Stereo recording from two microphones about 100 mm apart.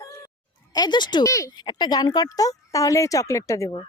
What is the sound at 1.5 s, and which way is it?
A child's voice, 50° left (ahead or behind).